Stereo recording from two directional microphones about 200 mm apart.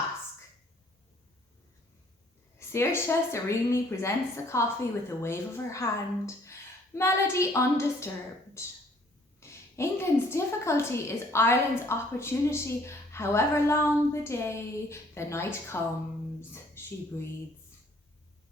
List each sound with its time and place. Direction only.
2.6 s a woman's voice: 15° left (ahead or behind)
9.4 s a woman's voice: 15° left (ahead or behind)